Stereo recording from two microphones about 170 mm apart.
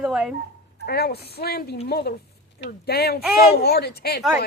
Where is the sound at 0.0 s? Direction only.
5° right (ahead or behind).